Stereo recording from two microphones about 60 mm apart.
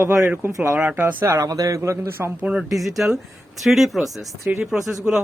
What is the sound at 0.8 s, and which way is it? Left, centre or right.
Speech, right.